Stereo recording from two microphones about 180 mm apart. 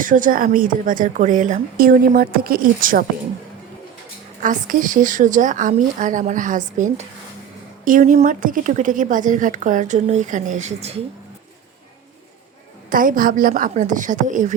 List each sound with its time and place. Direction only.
0.0 s a woman's voice: 50° right (ahead or behind)
4.4 s a woman's voice: 45° right (ahead or behind)
12.9 s a woman's voice: 50° right (ahead or behind)